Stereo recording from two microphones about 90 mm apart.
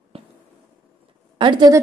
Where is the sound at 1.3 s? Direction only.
60° right (ahead or behind).